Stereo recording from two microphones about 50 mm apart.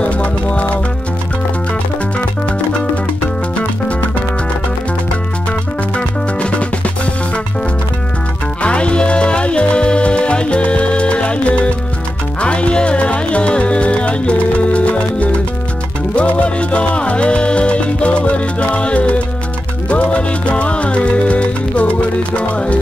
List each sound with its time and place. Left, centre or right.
0.0 s music: left
5.9 s music: left
8.6 s music: left